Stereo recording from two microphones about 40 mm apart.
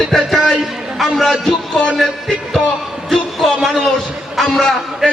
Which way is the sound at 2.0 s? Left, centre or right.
Centre.